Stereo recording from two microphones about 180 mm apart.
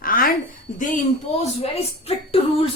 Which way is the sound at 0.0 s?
55° left (ahead or behind).